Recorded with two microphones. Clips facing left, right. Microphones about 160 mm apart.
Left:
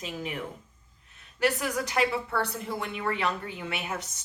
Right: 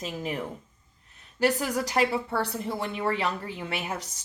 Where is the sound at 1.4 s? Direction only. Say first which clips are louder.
Right 2 dB; 35° right (ahead or behind).